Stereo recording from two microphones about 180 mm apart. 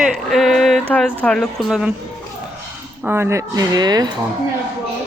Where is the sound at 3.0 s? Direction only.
10° right (ahead or behind).